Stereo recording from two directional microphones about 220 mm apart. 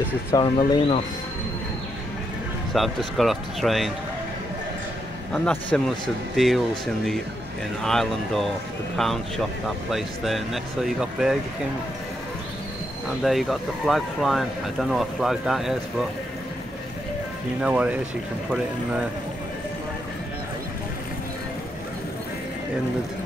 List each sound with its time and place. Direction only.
0.3 s speech: 20° left (ahead or behind)
2.7 s speech: centre (ahead or behind)
5.3 s speech: 5° left (ahead or behind)
7.8 s speech: centre (ahead or behind)
13.2 s speech: centre (ahead or behind)
17.6 s speech: 5° right (ahead or behind)